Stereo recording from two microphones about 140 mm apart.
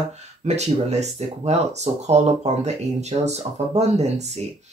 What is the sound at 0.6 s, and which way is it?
Speech, 50° right (ahead or behind).